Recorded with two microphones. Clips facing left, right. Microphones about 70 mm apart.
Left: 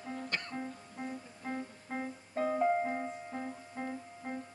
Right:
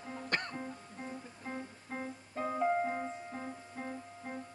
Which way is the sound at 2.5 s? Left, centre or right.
Centre.